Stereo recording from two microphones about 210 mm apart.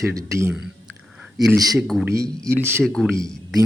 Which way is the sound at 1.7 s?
Centre (ahead or behind).